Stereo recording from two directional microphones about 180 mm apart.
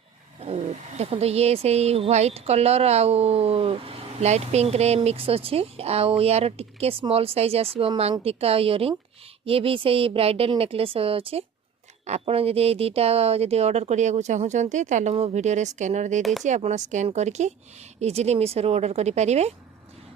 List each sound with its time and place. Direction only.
0.3 s speech: 35° right (ahead or behind)